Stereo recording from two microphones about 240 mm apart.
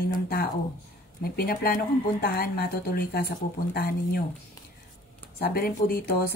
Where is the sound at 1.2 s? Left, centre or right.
Left.